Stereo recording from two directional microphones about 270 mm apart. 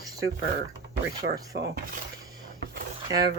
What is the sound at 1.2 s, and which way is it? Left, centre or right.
Speech, right.